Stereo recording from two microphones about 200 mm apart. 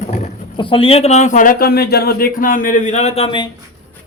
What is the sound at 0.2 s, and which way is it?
Speech, 25° left (ahead or behind).